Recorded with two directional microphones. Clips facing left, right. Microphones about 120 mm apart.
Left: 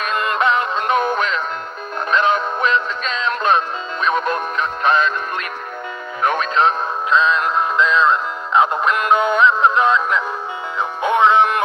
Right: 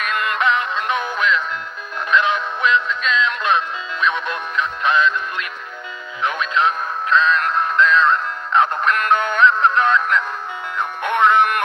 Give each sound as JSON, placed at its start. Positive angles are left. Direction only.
{"t": 0.0, "sound": "synthetic singing", "side_deg": 35}
{"t": 4.0, "sound": "music", "side_deg": 40}
{"t": 6.2, "sound": "speech", "side_deg": 45}
{"t": 7.5, "sound": "music", "side_deg": 10}